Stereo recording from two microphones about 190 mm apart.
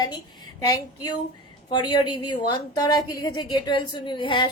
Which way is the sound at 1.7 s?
25° left (ahead or behind).